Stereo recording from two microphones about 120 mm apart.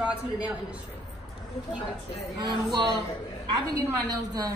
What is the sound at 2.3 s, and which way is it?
A woman's voice, 35° right (ahead or behind).